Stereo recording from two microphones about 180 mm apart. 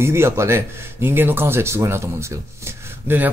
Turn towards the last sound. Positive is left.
turn(degrees=-10)  # may be behind; listen again after turning